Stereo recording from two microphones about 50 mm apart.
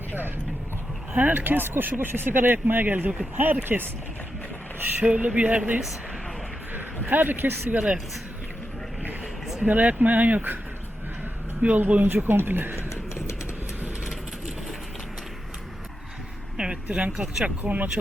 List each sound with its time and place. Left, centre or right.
1.1 s speech: right
5.0 s speech: right
6.7 s a sound: right
7.7 s speech: right
9.6 s speech: right
11.6 s speech: right
12.0 s speech: right
12.9 s music: left
16.6 s vehicle: right
17.4 s speech: right